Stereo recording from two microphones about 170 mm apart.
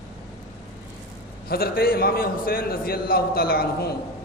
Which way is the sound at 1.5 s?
60° left (ahead or behind).